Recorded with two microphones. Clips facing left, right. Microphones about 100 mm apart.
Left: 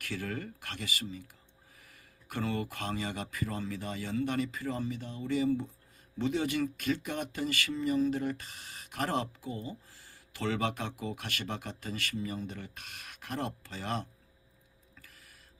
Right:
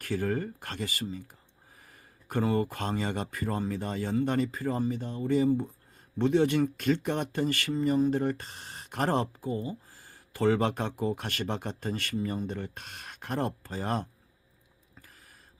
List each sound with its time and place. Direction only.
0.0 s speech: 45° right (ahead or behind)
1.8 s a sound: 35° right (ahead or behind)
2.7 s speech: 45° right (ahead or behind)
6.1 s speech: 60° right (ahead or behind); by 14.1 s 45° right (ahead or behind)